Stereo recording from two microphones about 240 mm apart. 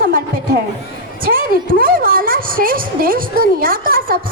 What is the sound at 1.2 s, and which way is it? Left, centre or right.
A woman's voice, right.